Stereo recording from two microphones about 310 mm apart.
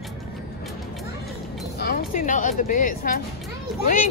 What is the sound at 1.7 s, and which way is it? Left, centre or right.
Speech, left.